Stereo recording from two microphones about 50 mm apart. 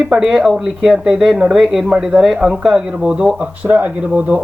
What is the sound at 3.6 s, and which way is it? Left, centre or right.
Speech, right.